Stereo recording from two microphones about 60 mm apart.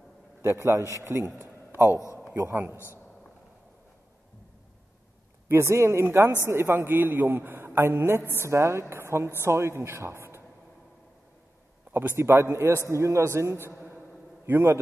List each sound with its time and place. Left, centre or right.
0.4 s a man's voice: right
1.9 s a man's voice: left
2.3 s a man's voice: right
5.5 s a man's voice: right
8.4 s a man's voice: right
11.9 s a man's voice: right
12.2 s a man's voice: right
13.8 s a sound: right